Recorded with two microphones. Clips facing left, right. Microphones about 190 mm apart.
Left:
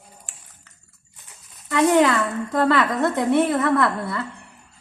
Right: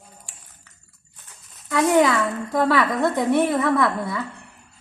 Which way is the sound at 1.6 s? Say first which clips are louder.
Left 1 dB; centre (ahead or behind).